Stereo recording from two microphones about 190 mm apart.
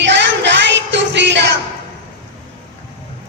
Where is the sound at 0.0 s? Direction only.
70° right (ahead or behind).